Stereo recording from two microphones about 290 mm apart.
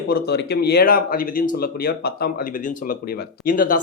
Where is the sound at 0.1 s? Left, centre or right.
Left.